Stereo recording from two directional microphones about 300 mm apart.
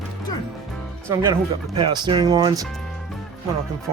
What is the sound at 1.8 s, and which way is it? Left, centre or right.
Speech, centre.